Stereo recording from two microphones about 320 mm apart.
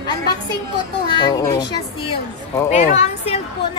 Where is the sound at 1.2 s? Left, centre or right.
Centre.